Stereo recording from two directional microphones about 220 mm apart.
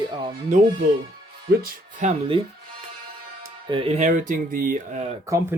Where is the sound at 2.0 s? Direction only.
35° right (ahead or behind).